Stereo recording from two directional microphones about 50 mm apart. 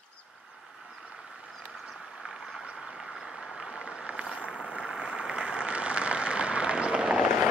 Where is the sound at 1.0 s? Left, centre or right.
Centre.